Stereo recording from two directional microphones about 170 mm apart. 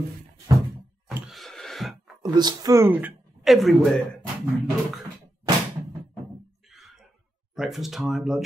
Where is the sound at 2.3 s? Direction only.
25° right (ahead or behind).